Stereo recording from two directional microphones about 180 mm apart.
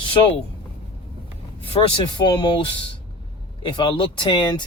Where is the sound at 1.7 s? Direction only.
30° left (ahead or behind).